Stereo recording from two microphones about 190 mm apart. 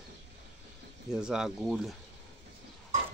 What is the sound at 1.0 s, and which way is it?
Speech, 5° right (ahead or behind).